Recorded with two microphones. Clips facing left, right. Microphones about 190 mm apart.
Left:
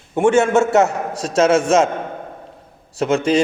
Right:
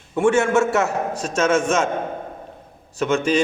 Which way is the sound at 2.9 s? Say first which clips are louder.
Left 2 dB; 35° left (ahead or behind).